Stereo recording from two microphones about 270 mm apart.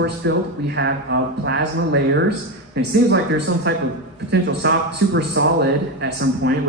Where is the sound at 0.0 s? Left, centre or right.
Right.